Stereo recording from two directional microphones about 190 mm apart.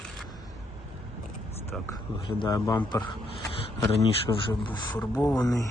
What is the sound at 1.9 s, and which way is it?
Speech, 20° left (ahead or behind).